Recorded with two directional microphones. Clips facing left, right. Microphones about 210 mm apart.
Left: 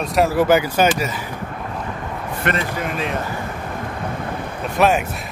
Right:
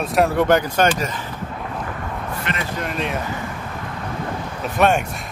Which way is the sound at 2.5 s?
55° left (ahead or behind).